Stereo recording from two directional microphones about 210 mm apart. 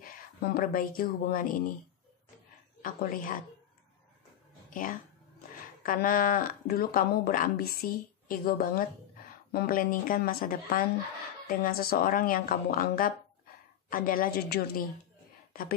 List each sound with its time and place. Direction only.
0.0 s speech: 45° left (ahead or behind)
2.8 s speech: 45° left (ahead or behind)
4.6 s speech: 40° left (ahead or behind)